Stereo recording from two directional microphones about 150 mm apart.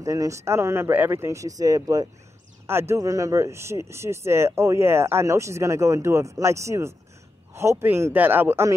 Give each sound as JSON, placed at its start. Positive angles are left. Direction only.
{"t": 0.0, "sound": "speech", "side_deg": -20}